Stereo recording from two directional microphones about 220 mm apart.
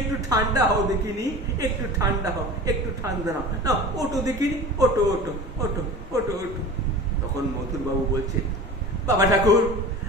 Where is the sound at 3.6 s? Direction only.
15° right (ahead or behind).